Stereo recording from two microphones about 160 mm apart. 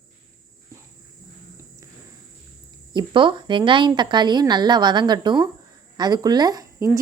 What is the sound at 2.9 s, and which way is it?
A woman's voice, 30° right (ahead or behind).